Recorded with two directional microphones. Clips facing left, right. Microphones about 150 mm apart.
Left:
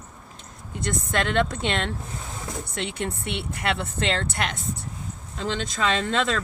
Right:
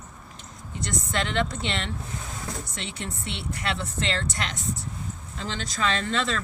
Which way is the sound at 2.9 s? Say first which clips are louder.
Left 4 dB; 55° left (ahead or behind).